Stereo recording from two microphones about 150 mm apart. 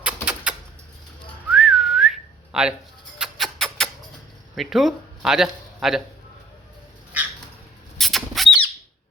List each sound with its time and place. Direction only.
0.0 s typewriter: 10° right (ahead or behind)
1.5 s whistling: centre (ahead or behind)
3.2 s rodents: centre (ahead or behind)
4.5 s speech: centre (ahead or behind)
7.9 s rodents: centre (ahead or behind)